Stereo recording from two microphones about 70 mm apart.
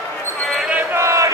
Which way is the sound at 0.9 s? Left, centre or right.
Right.